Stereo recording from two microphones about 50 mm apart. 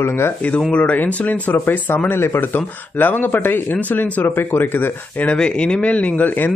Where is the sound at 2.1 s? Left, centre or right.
Left.